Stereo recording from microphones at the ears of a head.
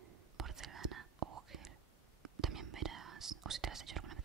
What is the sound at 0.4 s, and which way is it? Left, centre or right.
Whispering, right.